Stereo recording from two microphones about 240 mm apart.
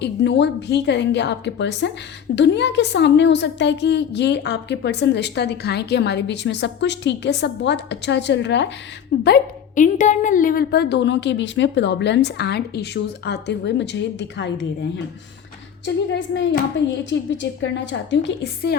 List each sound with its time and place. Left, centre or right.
0.0 s a woman's voice: left
9.2 s a woman's voice: left
16.1 s a woman's voice: left